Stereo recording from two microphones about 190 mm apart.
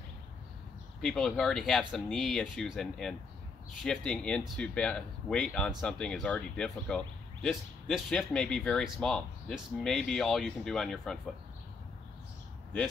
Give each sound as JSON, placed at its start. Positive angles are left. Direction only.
{"t": 1.0, "sound": "speech", "side_deg": 0}